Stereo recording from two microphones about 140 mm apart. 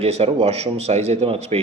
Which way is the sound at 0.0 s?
50° right (ahead or behind).